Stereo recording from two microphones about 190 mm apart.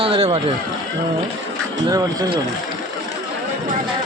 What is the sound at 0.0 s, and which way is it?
Speech, 30° right (ahead or behind).